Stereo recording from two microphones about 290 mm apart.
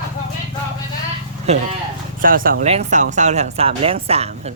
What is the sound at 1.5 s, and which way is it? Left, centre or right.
Speech, right.